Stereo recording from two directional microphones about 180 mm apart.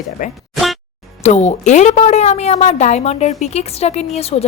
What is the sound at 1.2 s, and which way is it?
A woman's voice, 40° left (ahead or behind).